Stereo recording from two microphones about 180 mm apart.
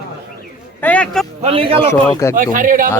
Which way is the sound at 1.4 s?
30° right (ahead or behind).